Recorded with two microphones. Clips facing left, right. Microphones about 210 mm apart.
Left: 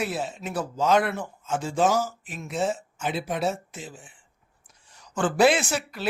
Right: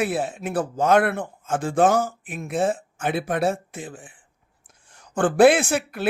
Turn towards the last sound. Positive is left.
turn(degrees=-55)  # may be behind; listen again after turning